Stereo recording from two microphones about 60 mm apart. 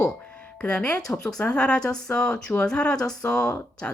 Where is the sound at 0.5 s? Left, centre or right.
Centre.